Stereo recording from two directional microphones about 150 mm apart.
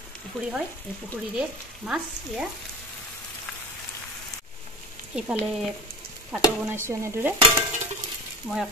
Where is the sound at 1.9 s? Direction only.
5° right (ahead or behind).